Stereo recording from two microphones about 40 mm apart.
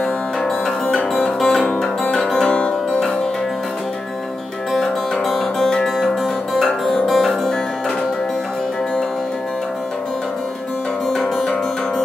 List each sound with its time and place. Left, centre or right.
1.4 s music: centre
2.5 s music: left
4.7 s music: centre
11.1 s music: centre